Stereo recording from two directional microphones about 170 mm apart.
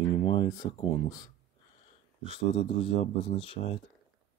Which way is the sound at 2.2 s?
30° left (ahead or behind).